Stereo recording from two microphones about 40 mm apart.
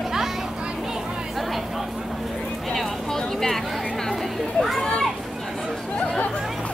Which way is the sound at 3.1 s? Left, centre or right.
Centre.